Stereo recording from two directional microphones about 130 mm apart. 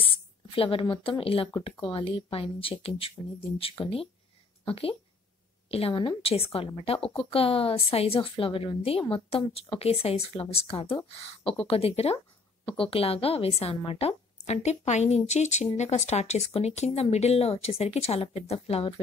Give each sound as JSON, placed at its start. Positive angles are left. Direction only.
{"t": 0.0, "sound": "a woman's voice", "side_deg": 45}